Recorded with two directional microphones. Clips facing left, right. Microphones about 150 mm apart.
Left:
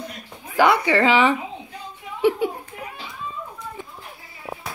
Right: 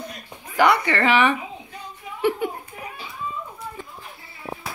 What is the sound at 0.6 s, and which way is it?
Speech, 15° left (ahead or behind).